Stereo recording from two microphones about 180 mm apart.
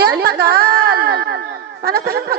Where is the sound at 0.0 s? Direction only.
60° right (ahead or behind).